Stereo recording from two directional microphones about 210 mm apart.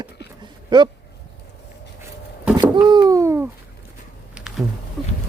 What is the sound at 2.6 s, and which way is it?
Wail, 20° right (ahead or behind).